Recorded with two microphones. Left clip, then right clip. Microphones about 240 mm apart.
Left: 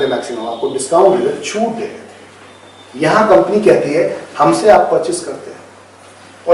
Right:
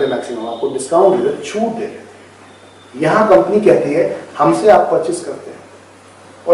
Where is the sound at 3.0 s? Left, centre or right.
Centre.